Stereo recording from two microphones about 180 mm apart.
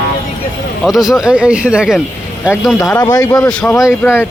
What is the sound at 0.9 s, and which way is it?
Speech, centre (ahead or behind).